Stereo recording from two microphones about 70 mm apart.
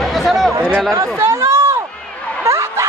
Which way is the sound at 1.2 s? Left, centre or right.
Right.